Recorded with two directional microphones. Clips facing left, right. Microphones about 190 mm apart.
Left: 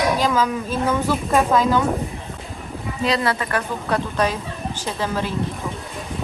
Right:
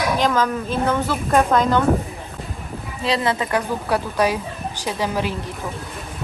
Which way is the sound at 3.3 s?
15° right (ahead or behind).